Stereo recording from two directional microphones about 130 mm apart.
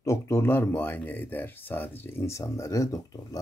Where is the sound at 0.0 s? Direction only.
20° left (ahead or behind).